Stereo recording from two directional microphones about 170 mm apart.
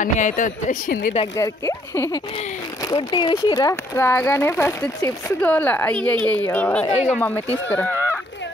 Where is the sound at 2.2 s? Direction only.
35° left (ahead or behind).